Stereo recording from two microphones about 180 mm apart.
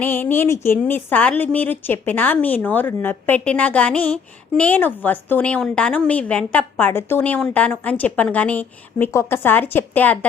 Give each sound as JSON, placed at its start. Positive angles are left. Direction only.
{"t": 0.0, "sound": "a woman's voice", "side_deg": 10}